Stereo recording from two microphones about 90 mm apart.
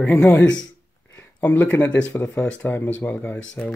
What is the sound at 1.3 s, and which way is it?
Speech, 20° left (ahead or behind).